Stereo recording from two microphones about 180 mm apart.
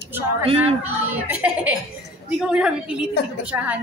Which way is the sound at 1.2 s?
5° right (ahead or behind).